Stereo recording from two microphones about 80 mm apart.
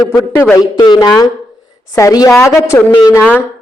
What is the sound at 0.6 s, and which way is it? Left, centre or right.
A man's voice, left.